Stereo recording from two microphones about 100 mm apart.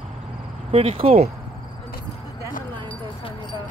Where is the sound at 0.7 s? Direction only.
75° right (ahead or behind).